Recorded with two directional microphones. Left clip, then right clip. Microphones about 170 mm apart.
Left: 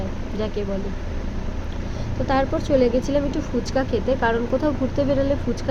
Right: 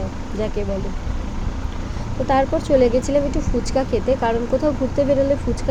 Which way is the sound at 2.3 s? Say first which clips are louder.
Right 3 dB; 10° right (ahead or behind).